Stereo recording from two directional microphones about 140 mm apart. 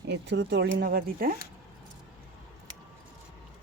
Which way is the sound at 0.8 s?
90° right.